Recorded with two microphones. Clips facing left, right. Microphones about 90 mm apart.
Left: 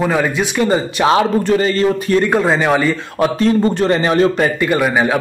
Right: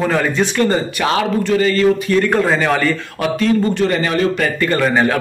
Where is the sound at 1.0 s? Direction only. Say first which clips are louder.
Left 6 dB; 25° left (ahead or behind).